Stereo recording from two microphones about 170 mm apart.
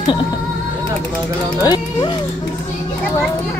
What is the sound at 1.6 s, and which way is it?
Speech, 25° left (ahead or behind).